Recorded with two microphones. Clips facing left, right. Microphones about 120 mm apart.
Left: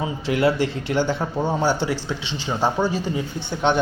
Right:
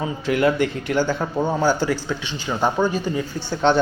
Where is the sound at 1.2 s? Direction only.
Centre (ahead or behind).